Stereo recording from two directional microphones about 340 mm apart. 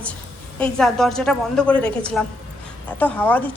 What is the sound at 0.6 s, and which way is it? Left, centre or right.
A woman's voice, centre.